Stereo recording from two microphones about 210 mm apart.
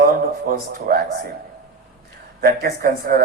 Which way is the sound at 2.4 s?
45° right (ahead or behind).